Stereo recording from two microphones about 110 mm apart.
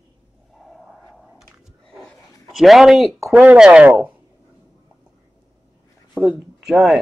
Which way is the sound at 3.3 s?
10° right (ahead or behind).